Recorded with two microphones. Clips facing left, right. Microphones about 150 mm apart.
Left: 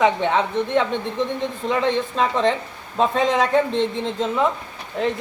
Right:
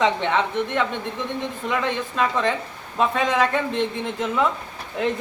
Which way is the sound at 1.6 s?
25° left (ahead or behind).